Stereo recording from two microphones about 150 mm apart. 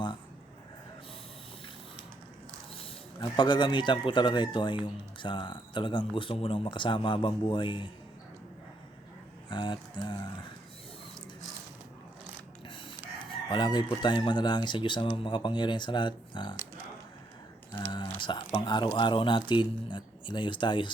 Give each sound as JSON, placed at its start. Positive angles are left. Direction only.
{"t": 2.7, "sound": "speech", "side_deg": 35}
{"t": 9.5, "sound": "speech", "side_deg": 30}
{"t": 13.5, "sound": "chicken", "side_deg": 30}
{"t": 14.0, "sound": "speech", "side_deg": 30}
{"t": 17.7, "sound": "speech", "side_deg": 35}